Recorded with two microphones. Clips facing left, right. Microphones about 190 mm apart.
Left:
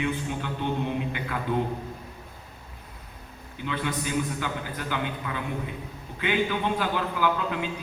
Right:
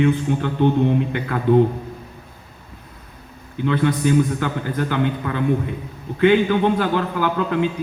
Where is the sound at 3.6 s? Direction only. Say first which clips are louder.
Right 11 dB; 55° right (ahead or behind).